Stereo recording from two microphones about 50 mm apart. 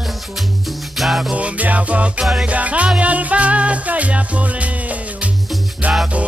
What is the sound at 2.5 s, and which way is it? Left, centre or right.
Music, right.